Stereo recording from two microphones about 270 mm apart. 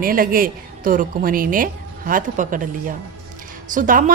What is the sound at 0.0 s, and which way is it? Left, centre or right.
A woman's voice, right.